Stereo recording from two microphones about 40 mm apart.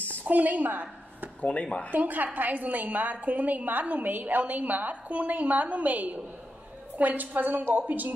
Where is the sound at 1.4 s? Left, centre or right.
Left.